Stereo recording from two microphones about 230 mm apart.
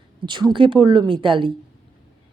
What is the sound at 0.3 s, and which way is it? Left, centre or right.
A woman's voice, centre.